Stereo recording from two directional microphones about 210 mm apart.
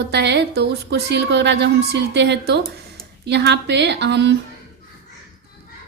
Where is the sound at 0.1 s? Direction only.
55° right (ahead or behind).